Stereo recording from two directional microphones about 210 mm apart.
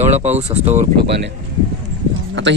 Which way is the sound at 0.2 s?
30° right (ahead or behind).